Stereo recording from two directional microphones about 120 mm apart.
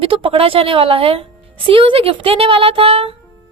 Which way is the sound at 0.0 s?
50° right (ahead or behind).